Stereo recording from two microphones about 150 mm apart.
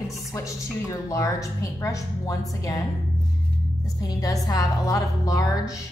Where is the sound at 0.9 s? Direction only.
20° left (ahead or behind).